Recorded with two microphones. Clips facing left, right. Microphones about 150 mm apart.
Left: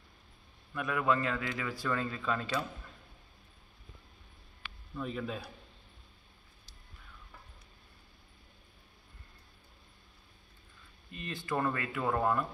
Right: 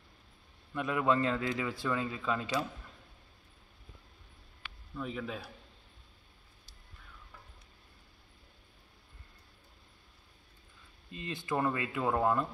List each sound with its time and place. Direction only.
0.7 s a man's voice: 25° right (ahead or behind)
4.9 s a man's voice: centre (ahead or behind)
11.1 s a man's voice: 20° right (ahead or behind)